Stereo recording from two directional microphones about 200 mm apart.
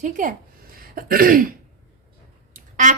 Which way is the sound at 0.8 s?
45° right (ahead or behind).